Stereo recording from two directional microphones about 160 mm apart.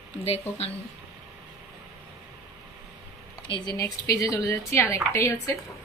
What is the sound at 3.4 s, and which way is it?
Speech, 30° left (ahead or behind).